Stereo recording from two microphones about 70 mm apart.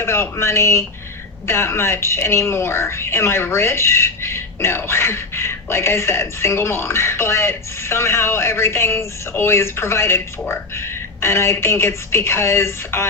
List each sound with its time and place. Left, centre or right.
0.0 s speech: left